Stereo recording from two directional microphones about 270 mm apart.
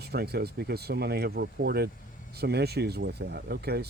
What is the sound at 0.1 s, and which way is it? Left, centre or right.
Speech, right.